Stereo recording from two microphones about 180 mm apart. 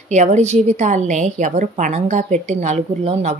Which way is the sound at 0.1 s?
40° right (ahead or behind).